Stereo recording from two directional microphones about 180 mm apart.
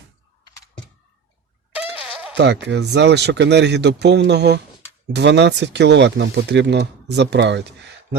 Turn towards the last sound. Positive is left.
turn(degrees=-75)  # may be behind; listen again after turning